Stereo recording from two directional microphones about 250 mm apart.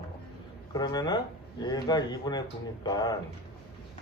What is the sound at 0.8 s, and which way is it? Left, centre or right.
Speech, centre.